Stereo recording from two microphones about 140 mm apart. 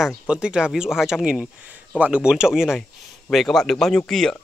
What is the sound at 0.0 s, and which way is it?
Speech, 5° right (ahead or behind).